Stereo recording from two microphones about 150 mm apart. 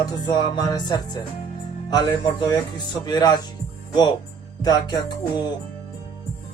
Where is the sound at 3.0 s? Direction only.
25° left (ahead or behind).